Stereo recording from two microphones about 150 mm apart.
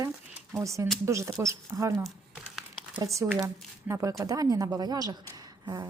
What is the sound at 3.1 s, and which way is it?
A woman's voice, 15° right (ahead or behind).